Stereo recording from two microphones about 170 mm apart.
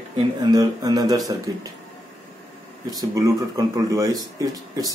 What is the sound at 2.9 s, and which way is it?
Speech, 20° right (ahead or behind).